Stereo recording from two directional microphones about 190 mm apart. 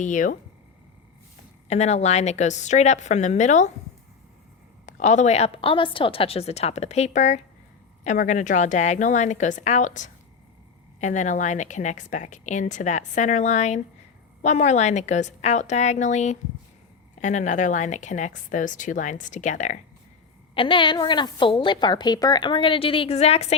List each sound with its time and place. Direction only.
0.0 s a woman's voice: 40° left (ahead or behind)
1.6 s a woman's voice: 35° left (ahead or behind)
4.9 s a woman's voice: 40° left (ahead or behind)
20.6 s a woman's voice: 25° left (ahead or behind)